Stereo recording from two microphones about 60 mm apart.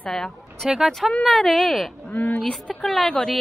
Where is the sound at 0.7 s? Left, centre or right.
Centre.